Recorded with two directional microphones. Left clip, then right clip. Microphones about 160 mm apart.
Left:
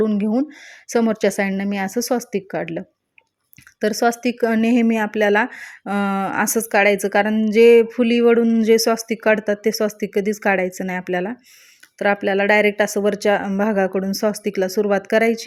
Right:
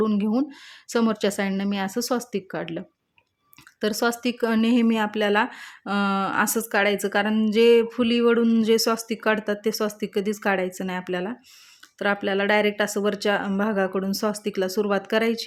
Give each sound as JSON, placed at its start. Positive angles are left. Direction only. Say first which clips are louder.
{"t": 0.0, "sound": "speech", "louder": "left 4 dB", "side_deg": 15}